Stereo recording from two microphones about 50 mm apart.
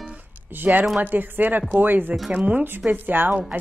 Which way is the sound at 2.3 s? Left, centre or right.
Right.